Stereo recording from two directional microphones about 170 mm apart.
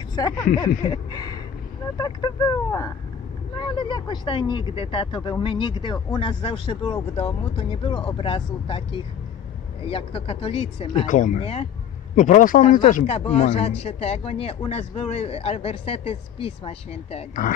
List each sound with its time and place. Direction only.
0.1 s speech: 25° left (ahead or behind)
11.1 s speech: 45° left (ahead or behind)
12.2 s speech: 50° left (ahead or behind)